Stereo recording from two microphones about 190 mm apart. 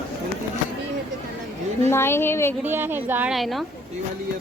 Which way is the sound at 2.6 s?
10° right (ahead or behind).